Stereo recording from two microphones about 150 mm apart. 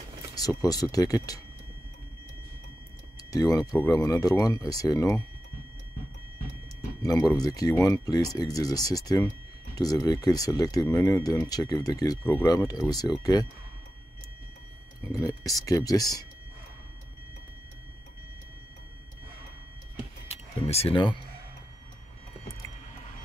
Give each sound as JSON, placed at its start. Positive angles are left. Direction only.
{"t": 0.4, "sound": "speech", "side_deg": 25}
{"t": 3.3, "sound": "speech", "side_deg": 25}
{"t": 7.0, "sound": "speech", "side_deg": 25}
{"t": 15.0, "sound": "speech", "side_deg": 25}
{"t": 20.2, "sound": "a sound", "side_deg": 40}